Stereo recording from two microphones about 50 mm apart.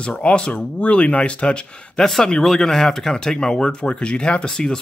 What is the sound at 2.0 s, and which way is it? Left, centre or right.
Speech, centre.